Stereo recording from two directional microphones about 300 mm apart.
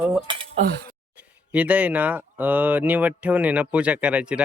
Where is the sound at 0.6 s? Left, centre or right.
Right.